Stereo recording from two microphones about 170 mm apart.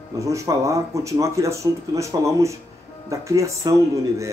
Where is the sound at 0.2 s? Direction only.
20° right (ahead or behind).